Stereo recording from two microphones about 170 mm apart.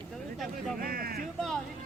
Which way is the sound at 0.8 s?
60° right (ahead or behind).